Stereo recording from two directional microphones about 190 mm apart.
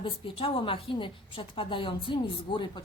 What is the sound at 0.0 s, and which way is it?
A woman's voice, 25° left (ahead or behind).